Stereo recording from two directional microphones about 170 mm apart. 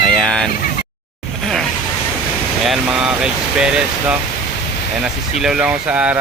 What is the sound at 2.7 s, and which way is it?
Speech, 5° right (ahead or behind).